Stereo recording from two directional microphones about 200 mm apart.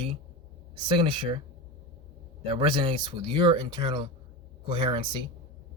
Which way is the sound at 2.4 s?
25° right (ahead or behind).